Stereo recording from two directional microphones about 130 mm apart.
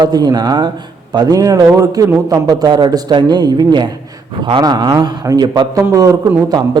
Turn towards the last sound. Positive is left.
turn(degrees=-30)  # may be behind; listen again after turning